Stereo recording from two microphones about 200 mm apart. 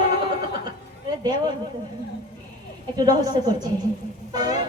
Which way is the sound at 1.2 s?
20° right (ahead or behind).